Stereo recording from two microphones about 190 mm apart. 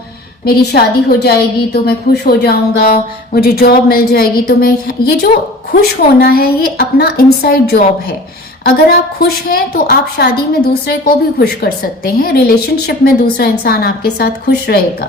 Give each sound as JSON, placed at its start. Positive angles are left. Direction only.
{"t": 0.4, "sound": "a woman's voice", "side_deg": 60}